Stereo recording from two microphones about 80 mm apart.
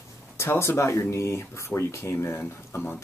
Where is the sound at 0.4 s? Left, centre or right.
Left.